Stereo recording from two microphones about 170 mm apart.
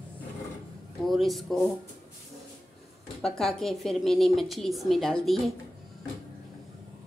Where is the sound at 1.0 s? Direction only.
Centre (ahead or behind).